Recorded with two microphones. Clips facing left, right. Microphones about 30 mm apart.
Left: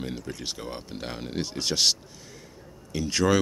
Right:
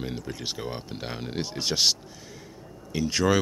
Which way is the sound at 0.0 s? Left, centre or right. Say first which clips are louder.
Right 1 dB; centre.